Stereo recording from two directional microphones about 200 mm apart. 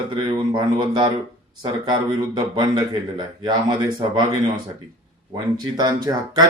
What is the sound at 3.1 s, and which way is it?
Speech, 20° right (ahead or behind).